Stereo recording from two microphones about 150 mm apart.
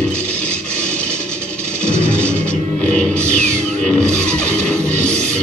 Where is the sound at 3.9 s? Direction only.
50° right (ahead or behind).